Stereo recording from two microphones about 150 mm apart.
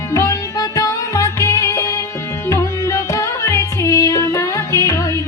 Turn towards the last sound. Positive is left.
turn(degrees=20)  # may be behind; listen again after turning